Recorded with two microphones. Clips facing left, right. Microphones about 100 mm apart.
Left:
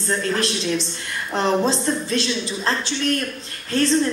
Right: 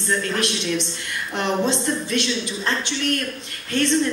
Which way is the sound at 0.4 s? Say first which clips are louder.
Left 1 dB; 35° left (ahead or behind).